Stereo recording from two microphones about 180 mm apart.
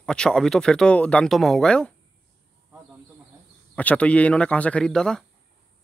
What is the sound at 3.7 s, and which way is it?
Speech, 10° left (ahead or behind).